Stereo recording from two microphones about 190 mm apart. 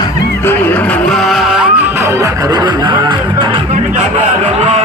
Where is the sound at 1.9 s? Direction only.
15° right (ahead or behind).